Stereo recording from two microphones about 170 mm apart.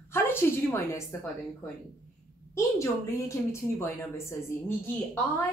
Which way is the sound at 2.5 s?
15° left (ahead or behind).